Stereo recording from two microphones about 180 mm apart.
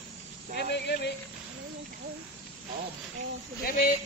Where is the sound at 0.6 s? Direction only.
70° left (ahead or behind).